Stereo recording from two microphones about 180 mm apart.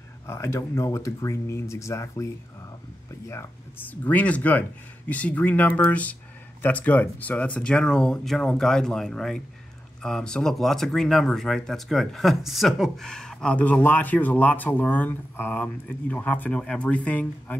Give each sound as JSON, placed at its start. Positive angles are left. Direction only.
{"t": 0.3, "sound": "speech", "side_deg": 15}